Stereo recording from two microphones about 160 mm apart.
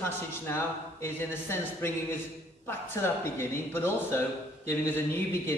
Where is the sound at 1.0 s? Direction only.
15° left (ahead or behind).